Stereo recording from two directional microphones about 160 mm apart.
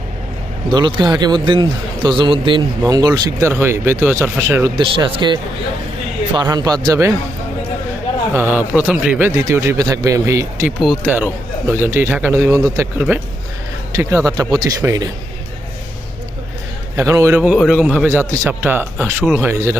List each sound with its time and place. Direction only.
0.7 s a man's voice: 30° right (ahead or behind); by 4.7 s 15° right (ahead or behind)
4.8 s a man's voice: 30° right (ahead or behind)
8.3 s a man's voice: 15° right (ahead or behind)
10.8 s a man's voice: 10° right (ahead or behind)
17.0 s speech: 20° right (ahead or behind)
17.5 s speech: centre (ahead or behind)